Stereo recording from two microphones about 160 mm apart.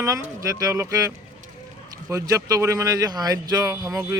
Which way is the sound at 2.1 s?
20° right (ahead or behind).